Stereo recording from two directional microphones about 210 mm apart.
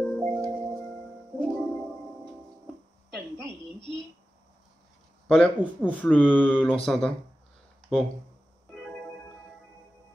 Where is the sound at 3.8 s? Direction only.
25° left (ahead or behind).